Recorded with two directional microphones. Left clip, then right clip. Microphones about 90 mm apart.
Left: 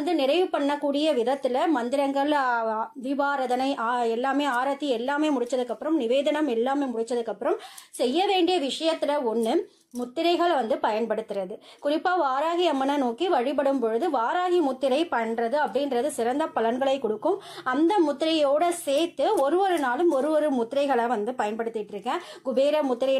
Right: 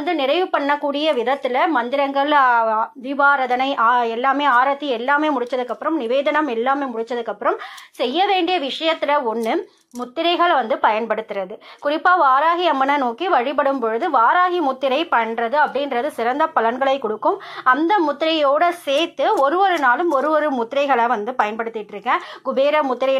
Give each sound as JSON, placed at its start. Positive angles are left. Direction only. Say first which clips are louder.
{"t": 0.0, "sound": "a woman's voice", "louder": "right 4 dB", "side_deg": 30}
{"t": 3.1, "sound": "a woman's voice", "louder": "right 9 dB", "side_deg": 30}
{"t": 12.3, "sound": "a woman's voice", "louder": "right 9 dB", "side_deg": 45}